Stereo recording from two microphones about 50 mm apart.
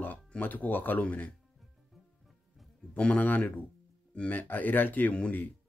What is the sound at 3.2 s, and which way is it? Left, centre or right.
Speech, left.